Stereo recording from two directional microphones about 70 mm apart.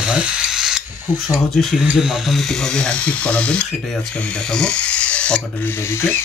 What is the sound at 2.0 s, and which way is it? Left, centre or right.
Sizzle, centre.